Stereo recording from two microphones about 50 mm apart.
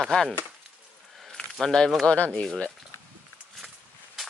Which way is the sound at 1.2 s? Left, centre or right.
Centre.